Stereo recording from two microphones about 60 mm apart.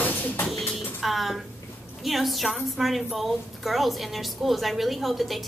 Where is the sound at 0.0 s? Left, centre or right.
Left.